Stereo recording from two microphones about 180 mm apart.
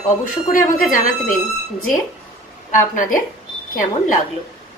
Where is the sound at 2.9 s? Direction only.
45° left (ahead or behind).